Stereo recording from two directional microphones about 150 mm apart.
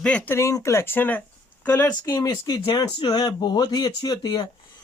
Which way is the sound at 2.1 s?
25° left (ahead or behind).